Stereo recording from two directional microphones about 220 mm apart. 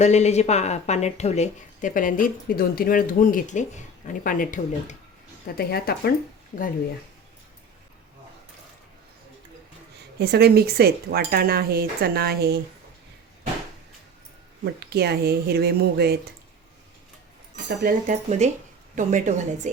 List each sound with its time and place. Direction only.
0.0 s a woman's voice: 30° left (ahead or behind)
10.2 s speech: 45° right (ahead or behind)
14.6 s speech: 45° right (ahead or behind)
17.8 s a woman's voice: 35° right (ahead or behind)